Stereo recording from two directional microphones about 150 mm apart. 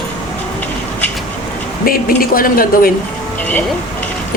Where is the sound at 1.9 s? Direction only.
75° left (ahead or behind).